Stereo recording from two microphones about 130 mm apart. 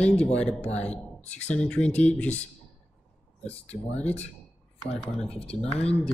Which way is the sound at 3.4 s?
10° left (ahead or behind).